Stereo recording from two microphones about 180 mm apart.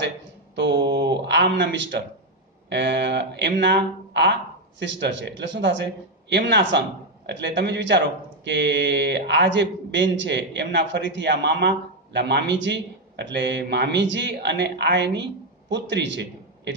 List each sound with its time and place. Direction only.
0.6 s a man's voice: 75° right (ahead or behind)